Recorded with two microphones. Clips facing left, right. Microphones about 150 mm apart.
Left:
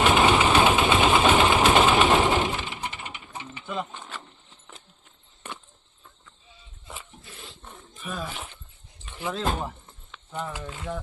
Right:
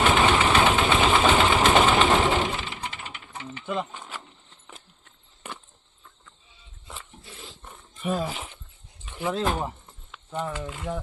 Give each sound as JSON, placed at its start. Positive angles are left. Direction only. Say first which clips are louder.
{"t": 0.0, "sound": "engine", "louder": "left 1 dB", "side_deg": 10}
{"t": 1.0, "sound": "sewing machine", "louder": "left 1 dB", "side_deg": 5}
{"t": 8.0, "sound": "speech", "louder": "right 7 dB", "side_deg": -30}
{"t": 9.0, "sound": "speech", "louder": "right 2 dB", "side_deg": -10}